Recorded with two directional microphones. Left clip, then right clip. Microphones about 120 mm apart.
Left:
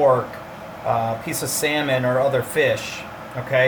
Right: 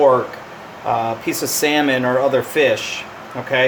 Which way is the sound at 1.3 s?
55° right (ahead or behind).